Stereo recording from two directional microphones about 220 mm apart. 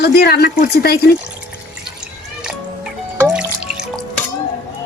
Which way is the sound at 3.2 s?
10° right (ahead or behind).